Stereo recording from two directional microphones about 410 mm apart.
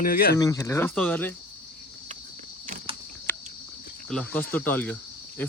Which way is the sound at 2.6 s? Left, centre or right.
Centre.